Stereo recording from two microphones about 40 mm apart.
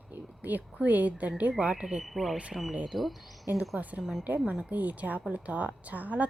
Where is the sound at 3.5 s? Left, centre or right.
Right.